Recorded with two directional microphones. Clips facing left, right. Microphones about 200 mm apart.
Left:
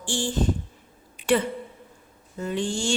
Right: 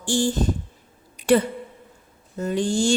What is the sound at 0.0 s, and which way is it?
Speech, 40° right (ahead or behind).